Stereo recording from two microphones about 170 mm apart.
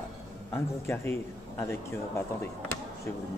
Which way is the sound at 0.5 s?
15° left (ahead or behind).